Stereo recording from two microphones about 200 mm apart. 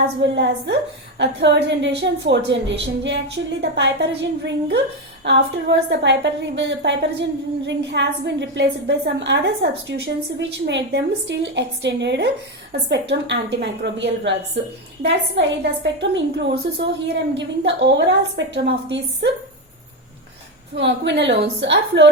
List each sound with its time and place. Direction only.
0.2 s a woman's voice: 60° right (ahead or behind)
20.7 s a woman's voice: 60° right (ahead or behind)